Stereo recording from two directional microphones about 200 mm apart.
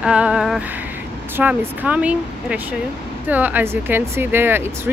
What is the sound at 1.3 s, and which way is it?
Speech, 10° right (ahead or behind).